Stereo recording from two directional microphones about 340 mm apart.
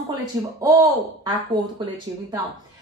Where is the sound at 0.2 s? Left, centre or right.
Centre.